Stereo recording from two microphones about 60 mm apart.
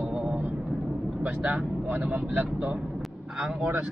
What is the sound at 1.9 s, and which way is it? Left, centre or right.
Speech, right.